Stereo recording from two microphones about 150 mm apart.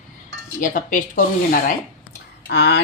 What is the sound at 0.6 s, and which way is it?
Speech, 60° left (ahead or behind).